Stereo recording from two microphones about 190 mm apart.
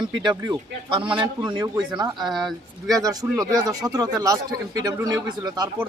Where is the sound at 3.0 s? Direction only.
20° right (ahead or behind).